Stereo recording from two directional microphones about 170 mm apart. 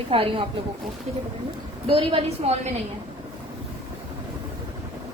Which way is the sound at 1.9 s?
30° right (ahead or behind).